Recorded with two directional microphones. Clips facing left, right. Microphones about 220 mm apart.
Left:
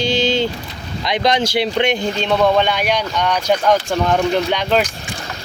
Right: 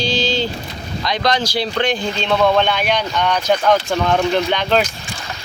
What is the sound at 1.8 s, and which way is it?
Speech, 15° left (ahead or behind).